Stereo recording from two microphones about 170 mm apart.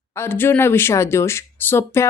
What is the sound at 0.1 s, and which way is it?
Speech, 15° left (ahead or behind).